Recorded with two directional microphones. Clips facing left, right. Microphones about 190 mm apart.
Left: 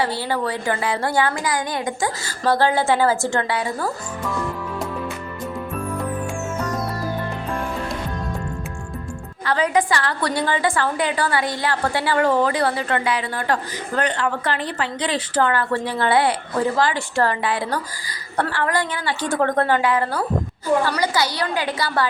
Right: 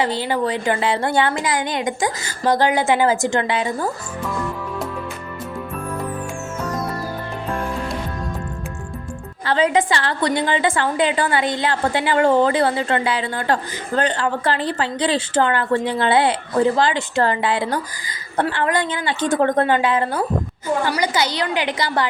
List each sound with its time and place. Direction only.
0.0 s a woman's voice: 20° right (ahead or behind)
9.5 s a woman's voice: 25° right (ahead or behind)